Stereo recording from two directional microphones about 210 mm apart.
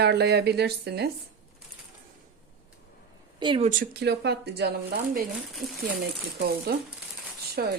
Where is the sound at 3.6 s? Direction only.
40° right (ahead or behind).